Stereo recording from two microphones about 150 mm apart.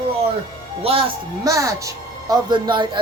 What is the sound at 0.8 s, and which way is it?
Speech, 40° right (ahead or behind).